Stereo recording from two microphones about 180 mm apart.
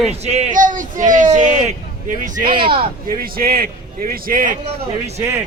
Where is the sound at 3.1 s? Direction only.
55° right (ahead or behind).